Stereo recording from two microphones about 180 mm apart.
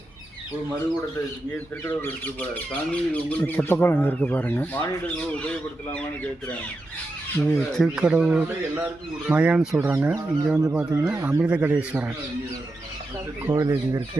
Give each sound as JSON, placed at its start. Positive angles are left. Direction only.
{"t": 1.8, "sound": "speech", "side_deg": 10}
{"t": 7.5, "sound": "speech", "side_deg": 0}
{"t": 13.5, "sound": "speech", "side_deg": -15}